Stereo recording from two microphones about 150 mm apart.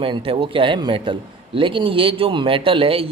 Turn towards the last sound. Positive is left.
turn(degrees=-35)  # may be behind; listen again after turning